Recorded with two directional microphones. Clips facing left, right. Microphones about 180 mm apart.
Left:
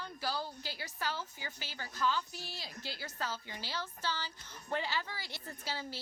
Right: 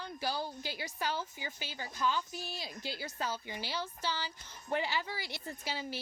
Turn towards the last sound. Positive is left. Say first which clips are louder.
# right 2 dB
turn(degrees=-15)  # may be behind; listen again after turning